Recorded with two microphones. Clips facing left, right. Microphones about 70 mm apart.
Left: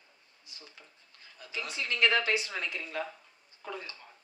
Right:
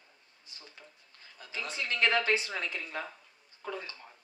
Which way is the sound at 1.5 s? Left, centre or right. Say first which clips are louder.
Even; right.